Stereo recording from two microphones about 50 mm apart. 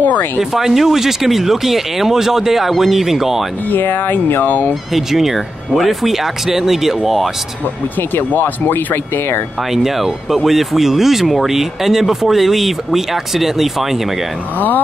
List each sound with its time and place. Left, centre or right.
0.0 s speech: left
0.4 s speech: centre
3.7 s speech: left
4.9 s speech: centre
8.1 s speech: left
9.7 s speech: centre